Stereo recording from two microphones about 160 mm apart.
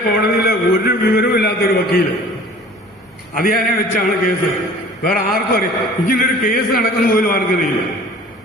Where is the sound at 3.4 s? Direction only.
65° left (ahead or behind).